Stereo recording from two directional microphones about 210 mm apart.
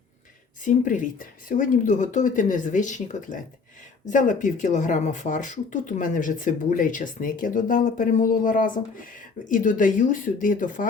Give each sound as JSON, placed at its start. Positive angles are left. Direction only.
{"t": 0.6, "sound": "speech", "side_deg": 40}